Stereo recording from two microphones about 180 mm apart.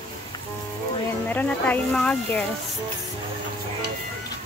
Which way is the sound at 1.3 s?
10° left (ahead or behind).